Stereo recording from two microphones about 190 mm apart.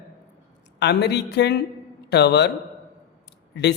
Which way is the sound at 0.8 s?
65° left (ahead or behind).